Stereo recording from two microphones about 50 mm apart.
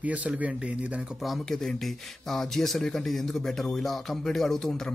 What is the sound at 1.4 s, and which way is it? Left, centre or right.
Speech, centre.